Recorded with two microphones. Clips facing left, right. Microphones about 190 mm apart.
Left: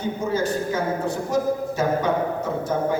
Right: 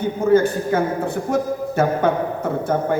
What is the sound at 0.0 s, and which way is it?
A man's voice, 55° right (ahead or behind).